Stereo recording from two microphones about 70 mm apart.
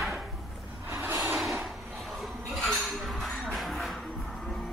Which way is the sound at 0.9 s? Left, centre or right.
Right.